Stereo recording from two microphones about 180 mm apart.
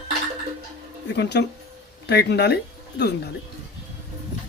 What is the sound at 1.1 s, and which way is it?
Speech, 70° left (ahead or behind).